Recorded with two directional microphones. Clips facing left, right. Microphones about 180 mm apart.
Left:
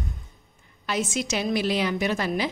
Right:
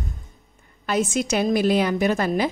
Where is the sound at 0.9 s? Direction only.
50° right (ahead or behind).